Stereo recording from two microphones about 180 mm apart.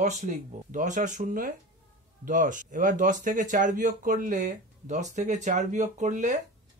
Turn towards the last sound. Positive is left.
turn(degrees=-40)  # may be behind; listen again after turning